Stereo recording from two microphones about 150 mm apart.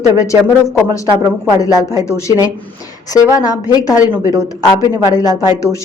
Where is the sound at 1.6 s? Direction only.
25° left (ahead or behind).